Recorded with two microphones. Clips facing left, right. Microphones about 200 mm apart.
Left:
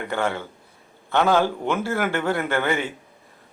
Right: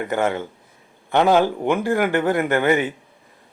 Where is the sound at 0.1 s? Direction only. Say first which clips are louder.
Right 2 dB; 20° right (ahead or behind).